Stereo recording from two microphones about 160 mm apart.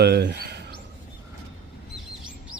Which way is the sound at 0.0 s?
90° right.